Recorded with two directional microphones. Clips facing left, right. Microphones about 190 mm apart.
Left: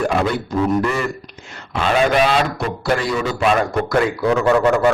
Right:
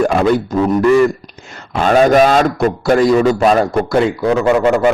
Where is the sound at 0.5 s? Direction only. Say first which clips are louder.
Right 4 dB; 45° right (ahead or behind).